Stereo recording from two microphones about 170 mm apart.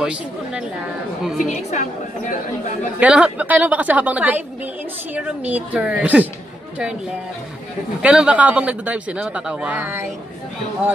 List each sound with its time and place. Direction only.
0.0 s speech: 5° right (ahead or behind)
1.4 s a woman's voice: 45° left (ahead or behind)
3.0 s speech: 5° right (ahead or behind)
8.0 s speech: 5° right (ahead or behind)